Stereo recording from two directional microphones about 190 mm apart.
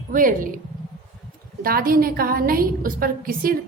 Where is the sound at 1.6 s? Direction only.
50° right (ahead or behind).